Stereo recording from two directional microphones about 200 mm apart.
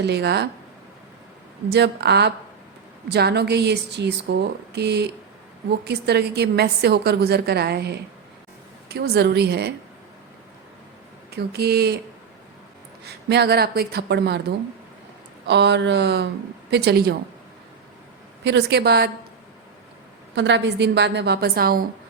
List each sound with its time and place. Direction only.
0.0 s a woman's voice: 55° right (ahead or behind)
1.7 s a woman's voice: 55° right (ahead or behind)
11.3 s speech: 55° right (ahead or behind)
13.1 s speech: 55° right (ahead or behind)
15.4 s a woman's voice: 60° right (ahead or behind)
18.4 s a woman's voice: 55° right (ahead or behind)
20.3 s a woman's voice: 60° right (ahead or behind)